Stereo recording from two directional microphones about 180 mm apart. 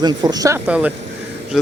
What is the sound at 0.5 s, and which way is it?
Speech, 10° right (ahead or behind).